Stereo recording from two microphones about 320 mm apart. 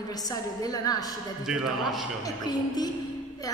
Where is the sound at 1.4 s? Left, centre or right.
Centre.